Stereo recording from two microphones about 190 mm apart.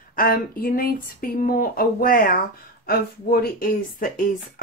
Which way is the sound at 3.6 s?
45° left (ahead or behind).